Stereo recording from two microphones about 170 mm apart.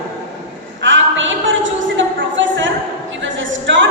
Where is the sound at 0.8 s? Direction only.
90° right.